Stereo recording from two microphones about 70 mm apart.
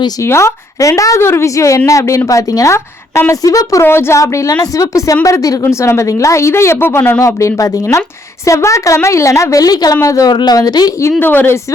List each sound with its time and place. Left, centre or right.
0.2 s a woman's voice: left
2.7 s a woman's voice: left
3.4 s a woman's voice: left
3.8 s a woman's voice: left
4.2 s a woman's voice: left
7.2 s a woman's voice: left
11.2 s speech: left